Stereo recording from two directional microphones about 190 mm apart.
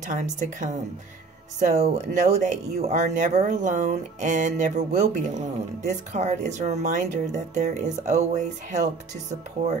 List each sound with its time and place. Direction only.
0.0 s speech: 40° right (ahead or behind)